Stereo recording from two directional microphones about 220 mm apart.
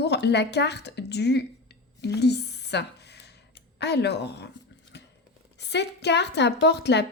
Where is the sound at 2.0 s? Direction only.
50° left (ahead or behind).